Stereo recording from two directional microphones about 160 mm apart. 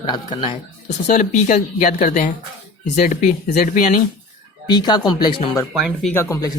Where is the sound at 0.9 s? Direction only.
50° left (ahead or behind).